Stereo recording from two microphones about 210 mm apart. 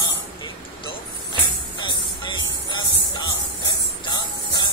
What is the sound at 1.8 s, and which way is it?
Music, 20° left (ahead or behind).